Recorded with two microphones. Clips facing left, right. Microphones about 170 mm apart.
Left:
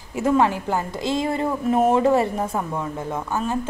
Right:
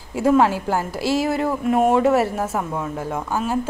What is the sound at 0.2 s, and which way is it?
Speech, 10° right (ahead or behind).